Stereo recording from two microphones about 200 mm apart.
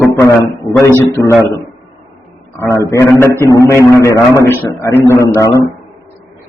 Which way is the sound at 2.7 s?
15° left (ahead or behind).